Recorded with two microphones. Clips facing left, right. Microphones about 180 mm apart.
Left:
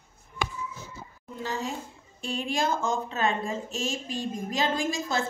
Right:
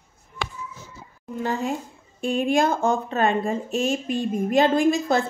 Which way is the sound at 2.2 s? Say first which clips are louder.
Right 8 dB; 55° right (ahead or behind).